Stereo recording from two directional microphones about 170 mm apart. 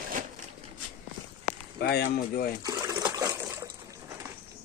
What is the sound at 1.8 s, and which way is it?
Speech, 75° left (ahead or behind).